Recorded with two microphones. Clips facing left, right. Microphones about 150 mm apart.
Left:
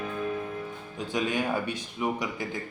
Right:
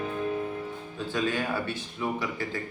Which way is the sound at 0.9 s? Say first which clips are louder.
Even; 15° left (ahead or behind).